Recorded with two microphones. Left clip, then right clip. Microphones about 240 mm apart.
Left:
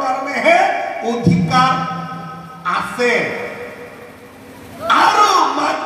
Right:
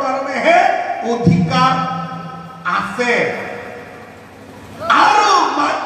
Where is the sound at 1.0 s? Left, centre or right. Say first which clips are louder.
Right 1 dB; left.